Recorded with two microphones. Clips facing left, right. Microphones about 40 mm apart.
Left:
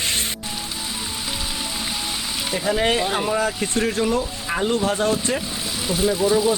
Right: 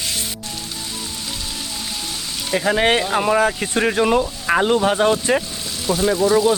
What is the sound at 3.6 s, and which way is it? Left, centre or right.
Speech, right.